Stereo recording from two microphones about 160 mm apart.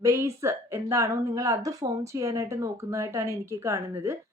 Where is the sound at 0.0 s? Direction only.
20° right (ahead or behind).